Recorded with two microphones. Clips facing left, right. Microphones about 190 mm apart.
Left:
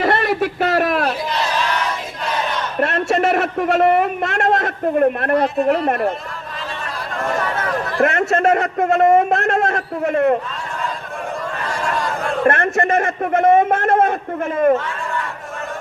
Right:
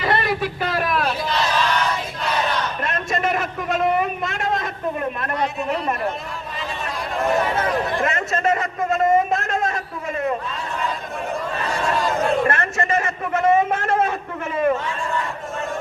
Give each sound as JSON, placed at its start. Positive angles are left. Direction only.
{"t": 0.3, "sound": "speech", "side_deg": 70}
{"t": 2.8, "sound": "a man's voice", "side_deg": 75}
{"t": 7.3, "sound": "speech", "side_deg": -20}
{"t": 8.0, "sound": "a man's voice", "side_deg": 65}
{"t": 12.5, "sound": "a man's voice", "side_deg": 55}